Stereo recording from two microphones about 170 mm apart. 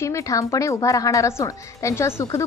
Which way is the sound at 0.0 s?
15° left (ahead or behind).